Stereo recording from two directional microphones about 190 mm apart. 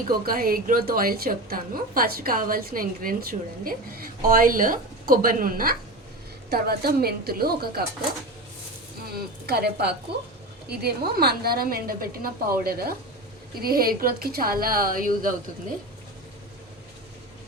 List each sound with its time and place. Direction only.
0.3 s a woman's voice: 50° right (ahead or behind)
9.5 s a woman's voice: 55° right (ahead or behind)